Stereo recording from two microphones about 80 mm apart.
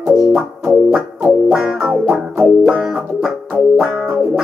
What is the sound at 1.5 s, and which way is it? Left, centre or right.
Music, centre.